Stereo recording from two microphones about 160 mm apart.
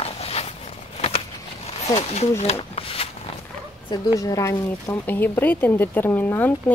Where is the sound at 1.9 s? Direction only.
45° left (ahead or behind).